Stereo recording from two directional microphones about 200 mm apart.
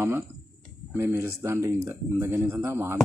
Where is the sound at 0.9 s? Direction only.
10° right (ahead or behind).